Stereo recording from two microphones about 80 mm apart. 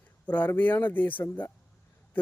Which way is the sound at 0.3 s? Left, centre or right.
Left.